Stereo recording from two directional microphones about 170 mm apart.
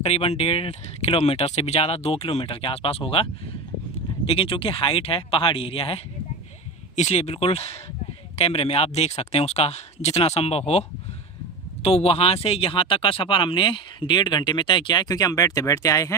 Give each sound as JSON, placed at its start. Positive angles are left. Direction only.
{"t": 0.0, "sound": "speech", "side_deg": 35}
{"t": 4.3, "sound": "speech", "side_deg": 30}